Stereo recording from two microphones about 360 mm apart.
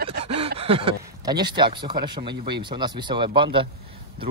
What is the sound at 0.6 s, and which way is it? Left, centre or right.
Speech, centre.